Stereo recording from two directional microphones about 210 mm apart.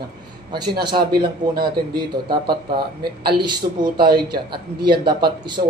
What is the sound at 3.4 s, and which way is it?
Speech, 20° right (ahead or behind).